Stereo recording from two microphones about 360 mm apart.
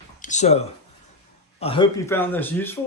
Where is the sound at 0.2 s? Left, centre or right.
Centre.